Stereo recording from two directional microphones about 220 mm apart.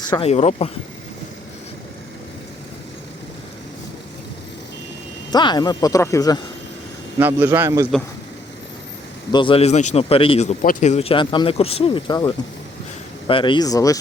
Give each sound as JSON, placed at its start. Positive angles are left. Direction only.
{"t": 0.1, "sound": "a man's voice", "side_deg": 25}
{"t": 5.3, "sound": "speech", "side_deg": 20}
{"t": 7.2, "sound": "a man's voice", "side_deg": -10}
{"t": 9.3, "sound": "a man's voice", "side_deg": 25}